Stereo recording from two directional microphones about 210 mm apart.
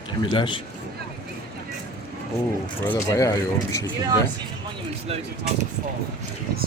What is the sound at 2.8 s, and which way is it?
Speech, 10° left (ahead or behind).